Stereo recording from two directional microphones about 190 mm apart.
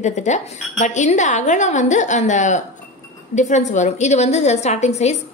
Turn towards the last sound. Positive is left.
turn(degrees=35)  # may be behind; listen again after turning